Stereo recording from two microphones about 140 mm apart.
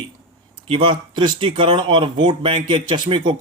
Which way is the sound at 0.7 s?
35° right (ahead or behind).